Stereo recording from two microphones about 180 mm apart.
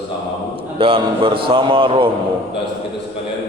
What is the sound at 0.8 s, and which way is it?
Speech, 30° right (ahead or behind).